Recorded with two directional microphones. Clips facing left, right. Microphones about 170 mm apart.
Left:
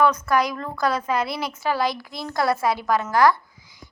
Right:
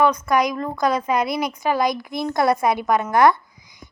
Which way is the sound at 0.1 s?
15° right (ahead or behind).